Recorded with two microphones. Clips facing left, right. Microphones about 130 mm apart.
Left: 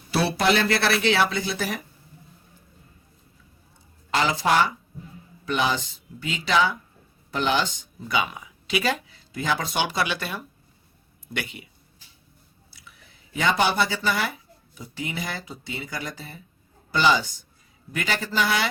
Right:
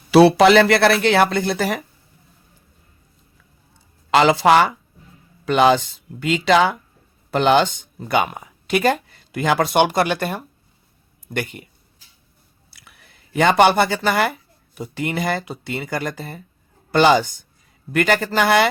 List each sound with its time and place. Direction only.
0.1 s speech: 90° right; by 1.8 s 60° right (ahead or behind)
4.1 s speech: 75° right (ahead or behind); by 11.7 s 45° right (ahead or behind)
12.7 s speech: 65° right (ahead or behind)